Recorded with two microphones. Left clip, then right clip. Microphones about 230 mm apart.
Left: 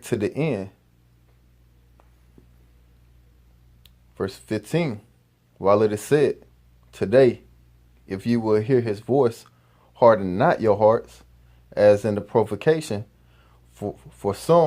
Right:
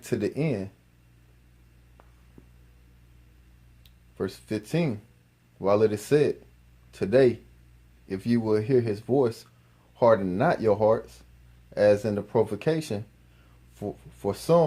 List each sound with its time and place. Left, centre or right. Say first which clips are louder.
0.0 s speech: left 4 dB; left
3.8 s speech: left 3 dB; left